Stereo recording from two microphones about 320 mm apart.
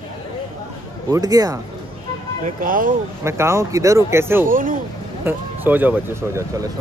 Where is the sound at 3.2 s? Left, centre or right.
Centre.